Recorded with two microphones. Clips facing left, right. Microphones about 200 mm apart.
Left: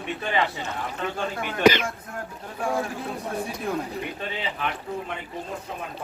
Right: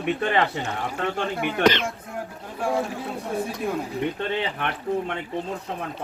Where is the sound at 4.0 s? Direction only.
65° right (ahead or behind).